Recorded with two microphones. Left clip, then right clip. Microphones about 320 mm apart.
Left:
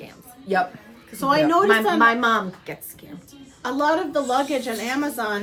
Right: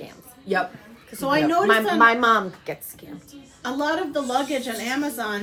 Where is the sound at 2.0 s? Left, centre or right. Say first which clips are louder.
Right 1 dB; centre.